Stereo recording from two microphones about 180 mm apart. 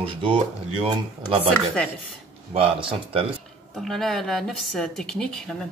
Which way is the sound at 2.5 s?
30° right (ahead or behind).